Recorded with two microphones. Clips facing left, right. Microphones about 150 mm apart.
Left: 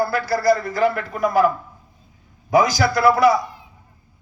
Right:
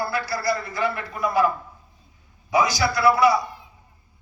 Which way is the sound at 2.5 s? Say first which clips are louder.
Left 4 dB; 50° left (ahead or behind).